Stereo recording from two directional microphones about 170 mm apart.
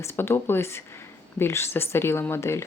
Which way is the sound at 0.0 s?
15° left (ahead or behind).